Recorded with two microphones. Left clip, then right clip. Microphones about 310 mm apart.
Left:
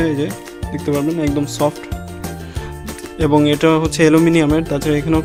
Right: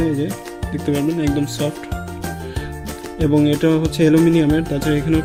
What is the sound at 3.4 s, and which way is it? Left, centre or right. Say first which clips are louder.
Speech: left 3 dB; centre.